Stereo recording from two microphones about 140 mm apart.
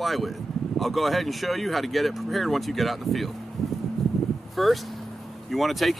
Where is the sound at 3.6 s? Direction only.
Centre (ahead or behind).